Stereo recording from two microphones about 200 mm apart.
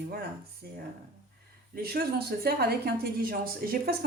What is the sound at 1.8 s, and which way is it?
A woman's voice, 50° right (ahead or behind).